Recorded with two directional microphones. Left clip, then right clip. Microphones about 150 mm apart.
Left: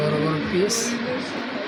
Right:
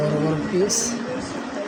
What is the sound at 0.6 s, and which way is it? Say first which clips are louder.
Speech: even; 65° right (ahead or behind).